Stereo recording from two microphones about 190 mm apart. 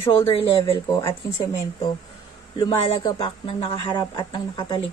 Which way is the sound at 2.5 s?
25° left (ahead or behind).